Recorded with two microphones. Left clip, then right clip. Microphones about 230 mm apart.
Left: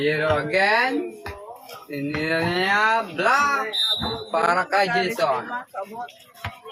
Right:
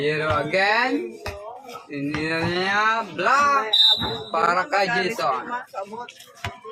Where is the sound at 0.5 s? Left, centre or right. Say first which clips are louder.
Even; centre.